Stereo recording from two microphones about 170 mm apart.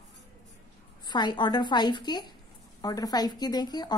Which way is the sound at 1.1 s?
25° left (ahead or behind).